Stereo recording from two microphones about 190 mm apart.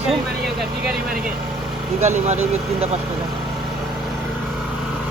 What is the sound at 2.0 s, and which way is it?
Speech, 35° right (ahead or behind).